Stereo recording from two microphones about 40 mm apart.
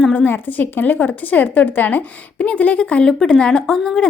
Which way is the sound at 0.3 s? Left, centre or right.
Left.